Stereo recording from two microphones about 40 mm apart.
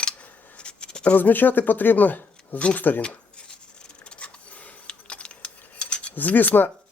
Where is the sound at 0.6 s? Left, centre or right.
Left.